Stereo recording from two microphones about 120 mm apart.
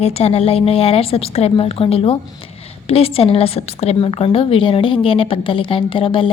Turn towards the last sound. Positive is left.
turn(degrees=45)  # may be behind; listen again after turning